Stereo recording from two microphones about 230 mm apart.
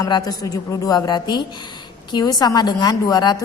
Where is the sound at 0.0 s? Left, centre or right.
Centre.